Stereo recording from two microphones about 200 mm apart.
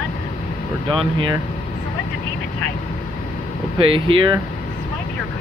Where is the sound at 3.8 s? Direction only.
25° right (ahead or behind).